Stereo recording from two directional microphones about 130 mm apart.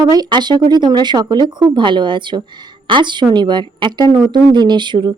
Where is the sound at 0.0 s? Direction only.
35° right (ahead or behind).